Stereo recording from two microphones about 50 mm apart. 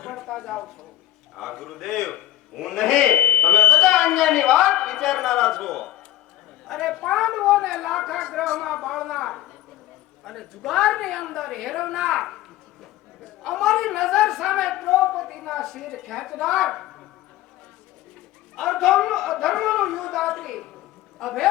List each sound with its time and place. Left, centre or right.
0.0 s a sound: centre
1.4 s a woman's voice: centre
3.2 s buzzer: left
3.5 s smoke detector: left
3.8 s a woman's voice: centre
18.5 s a woman's voice: centre